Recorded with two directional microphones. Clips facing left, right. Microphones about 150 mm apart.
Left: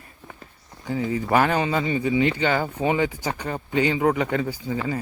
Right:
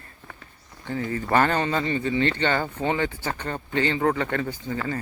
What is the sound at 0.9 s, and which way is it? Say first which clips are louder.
Speech: left 3 dB; 10° left (ahead or behind).